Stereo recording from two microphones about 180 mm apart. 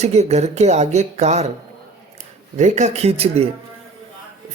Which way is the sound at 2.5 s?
40° right (ahead or behind).